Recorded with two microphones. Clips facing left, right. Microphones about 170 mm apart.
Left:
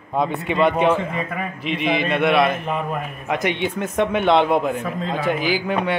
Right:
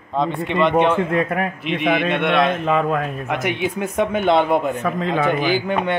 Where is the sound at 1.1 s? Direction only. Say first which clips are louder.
Right 6 dB; 75° right (ahead or behind).